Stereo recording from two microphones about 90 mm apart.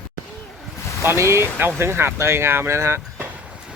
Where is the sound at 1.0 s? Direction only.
30° right (ahead or behind).